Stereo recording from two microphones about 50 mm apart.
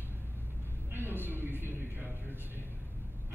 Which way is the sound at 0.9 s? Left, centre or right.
Right.